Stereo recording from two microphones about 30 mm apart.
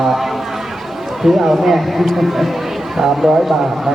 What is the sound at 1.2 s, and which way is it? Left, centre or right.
Speech, centre.